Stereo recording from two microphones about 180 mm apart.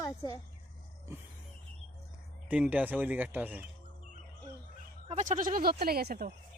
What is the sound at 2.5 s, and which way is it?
Speech, 5° right (ahead or behind).